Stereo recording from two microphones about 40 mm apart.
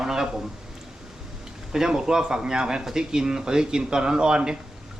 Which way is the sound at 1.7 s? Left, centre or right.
Centre.